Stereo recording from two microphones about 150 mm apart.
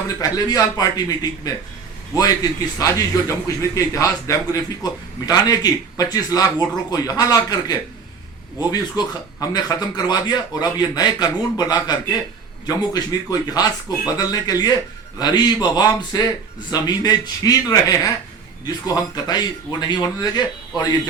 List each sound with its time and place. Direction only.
0.2 s a man's voice: 25° left (ahead or behind)
9.0 s a man's voice: 25° left (ahead or behind)